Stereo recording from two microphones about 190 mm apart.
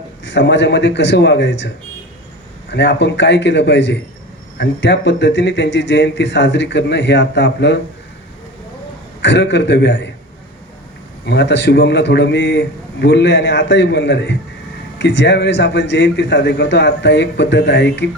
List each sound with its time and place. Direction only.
0.3 s speech: 70° left (ahead or behind)
9.2 s speech: 65° left (ahead or behind)
11.3 s a man's voice: 65° left (ahead or behind)